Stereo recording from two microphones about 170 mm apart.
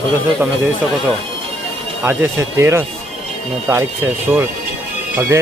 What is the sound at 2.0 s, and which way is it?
Speech, 15° right (ahead or behind).